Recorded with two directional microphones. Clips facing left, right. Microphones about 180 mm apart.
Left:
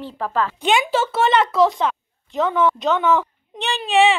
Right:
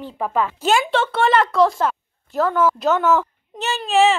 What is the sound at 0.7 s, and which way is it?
Speech, 5° left (ahead or behind).